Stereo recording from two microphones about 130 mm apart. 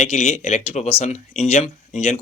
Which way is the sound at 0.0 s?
55° left (ahead or behind).